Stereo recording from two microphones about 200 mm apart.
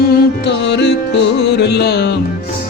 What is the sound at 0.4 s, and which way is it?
Music, 60° left (ahead or behind).